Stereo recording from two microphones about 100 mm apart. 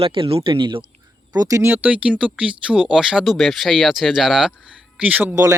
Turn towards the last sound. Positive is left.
turn(degrees=-35)  # may be behind; listen again after turning